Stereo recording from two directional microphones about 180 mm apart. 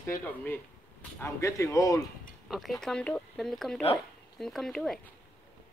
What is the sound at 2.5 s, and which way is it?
Speech, centre (ahead or behind).